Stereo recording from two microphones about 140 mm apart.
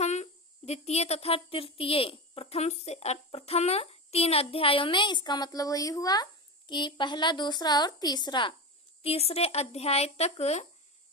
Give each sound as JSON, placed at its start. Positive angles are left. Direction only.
{"t": 0.0, "sound": "a woman's voice", "side_deg": 55}
{"t": 9.0, "sound": "speech", "side_deg": 45}